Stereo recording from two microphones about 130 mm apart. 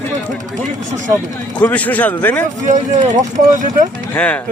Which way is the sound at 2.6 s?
70° right (ahead or behind).